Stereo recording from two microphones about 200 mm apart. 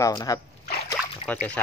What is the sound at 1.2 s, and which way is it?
Speech, 5° left (ahead or behind).